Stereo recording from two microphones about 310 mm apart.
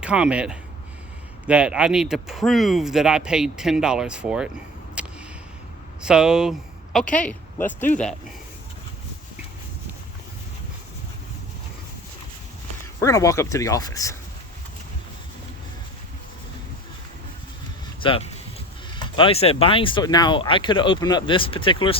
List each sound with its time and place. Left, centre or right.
0.0 s speech: centre
5.0 s a sound: centre
6.0 s speech: centre
13.0 s speech: centre
18.0 s speech: centre